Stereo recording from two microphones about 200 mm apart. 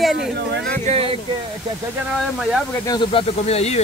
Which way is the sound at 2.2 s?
Centre (ahead or behind).